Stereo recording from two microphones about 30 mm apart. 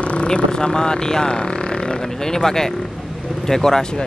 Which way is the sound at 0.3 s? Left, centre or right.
Left.